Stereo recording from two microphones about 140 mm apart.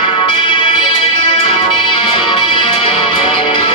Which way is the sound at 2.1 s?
40° left (ahead or behind).